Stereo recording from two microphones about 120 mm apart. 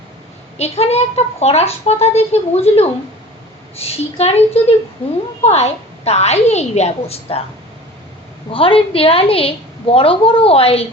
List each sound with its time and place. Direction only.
0.6 s speech: 60° left (ahead or behind)
8.5 s a woman's voice: 50° left (ahead or behind)